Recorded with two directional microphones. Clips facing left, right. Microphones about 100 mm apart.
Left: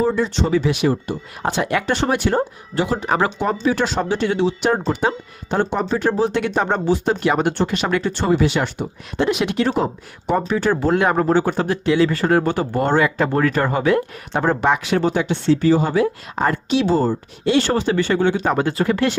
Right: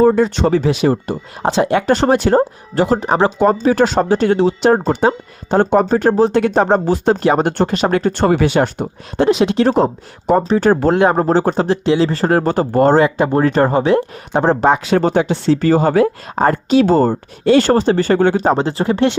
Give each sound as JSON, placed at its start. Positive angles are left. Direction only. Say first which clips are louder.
{"t": 0.0, "sound": "speech", "louder": "right 7 dB", "side_deg": -45}
{"t": 8.4, "sound": "speech", "louder": "right 5 dB", "side_deg": -45}
{"t": 10.9, "sound": "speech", "louder": "right 3 dB", "side_deg": -30}
{"t": 13.1, "sound": "speech", "louder": "right 4 dB", "side_deg": -25}
{"t": 15.5, "sound": "speech", "louder": "right 4 dB", "side_deg": -50}
{"t": 18.5, "sound": "speech", "louder": "right 2 dB", "side_deg": -25}